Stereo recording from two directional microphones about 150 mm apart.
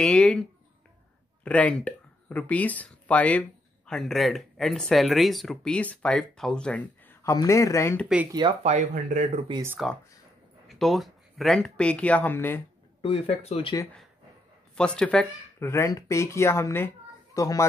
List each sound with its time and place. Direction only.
0.0 s speech: 5° left (ahead or behind)
7.2 s speech: 20° left (ahead or behind)
8.3 s speech: 30° right (ahead or behind)
8.6 s speech: 50° right (ahead or behind)
9.8 s speech: centre (ahead or behind)
13.0 s speech: 45° left (ahead or behind)
14.8 s speech: 5° left (ahead or behind)
15.6 s a woman's voice: 20° left (ahead or behind)